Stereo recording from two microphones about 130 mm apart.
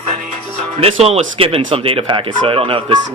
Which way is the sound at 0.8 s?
50° right (ahead or behind).